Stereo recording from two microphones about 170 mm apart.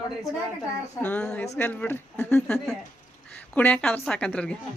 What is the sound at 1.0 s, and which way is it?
Speech, 10° left (ahead or behind).